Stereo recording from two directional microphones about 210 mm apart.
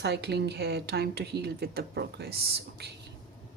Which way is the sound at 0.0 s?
50° right (ahead or behind).